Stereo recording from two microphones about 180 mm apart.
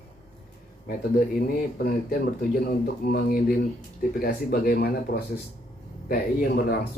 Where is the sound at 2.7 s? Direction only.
60° left (ahead or behind).